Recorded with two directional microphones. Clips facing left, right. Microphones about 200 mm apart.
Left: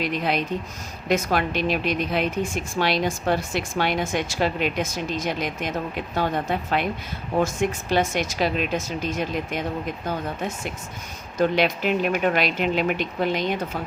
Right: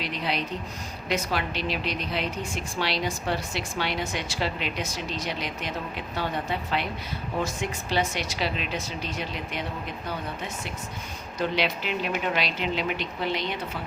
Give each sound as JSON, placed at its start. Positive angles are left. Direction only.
{"t": 0.0, "sound": "a woman's voice", "side_deg": 50}
{"t": 11.3, "sound": "a woman's voice", "side_deg": 50}